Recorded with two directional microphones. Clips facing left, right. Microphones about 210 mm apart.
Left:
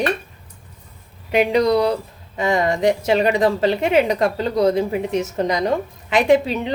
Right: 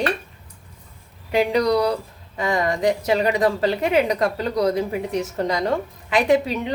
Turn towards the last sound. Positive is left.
turn(degrees=25)  # may be behind; listen again after turning